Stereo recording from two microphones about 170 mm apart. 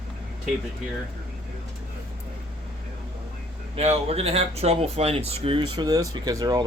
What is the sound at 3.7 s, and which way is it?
Speech, 35° right (ahead or behind).